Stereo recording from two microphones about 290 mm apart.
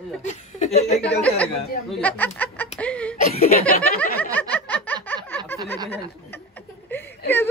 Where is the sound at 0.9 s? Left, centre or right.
Centre.